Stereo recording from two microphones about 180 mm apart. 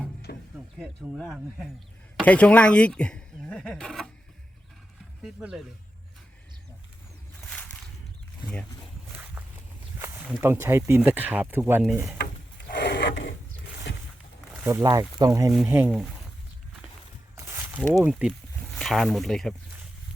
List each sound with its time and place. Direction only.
0.3 s a sound: 60° left (ahead or behind)
0.8 s speech: centre (ahead or behind)
5.2 s speech: 5° right (ahead or behind)
7.4 s a sound: 5° left (ahead or behind)
8.4 s speech: centre (ahead or behind)
9.1 s a sound: 10° right (ahead or behind)
10.4 s speech: 15° right (ahead or behind)
12.1 s drawer open or close: 60° left (ahead or behind)
14.6 s speech: 15° right (ahead or behind)
15.5 s speech: 10° right (ahead or behind)
17.3 s a sound: 15° right (ahead or behind)
17.9 s speech: 5° right (ahead or behind)